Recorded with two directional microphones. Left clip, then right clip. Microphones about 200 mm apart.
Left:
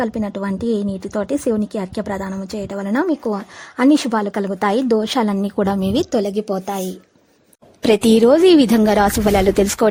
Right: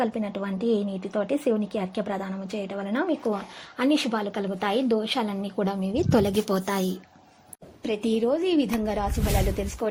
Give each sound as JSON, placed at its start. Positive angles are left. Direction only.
{"t": 0.0, "sound": "speech", "side_deg": 30}
{"t": 6.1, "sound": "a woman's voice", "side_deg": 10}
{"t": 7.8, "sound": "a woman's voice", "side_deg": 65}